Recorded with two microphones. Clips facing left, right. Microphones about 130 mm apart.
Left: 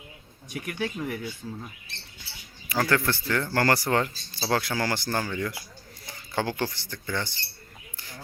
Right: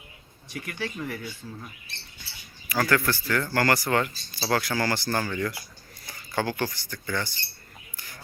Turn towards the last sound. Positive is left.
turn(degrees=25)  # may be behind; listen again after turning